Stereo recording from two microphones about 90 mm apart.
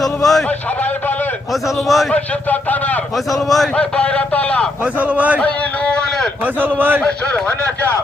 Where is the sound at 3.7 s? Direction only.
15° left (ahead or behind).